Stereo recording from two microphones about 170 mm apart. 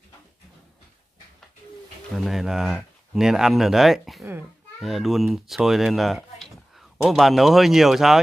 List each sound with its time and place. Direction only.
2.1 s speech: centre (ahead or behind)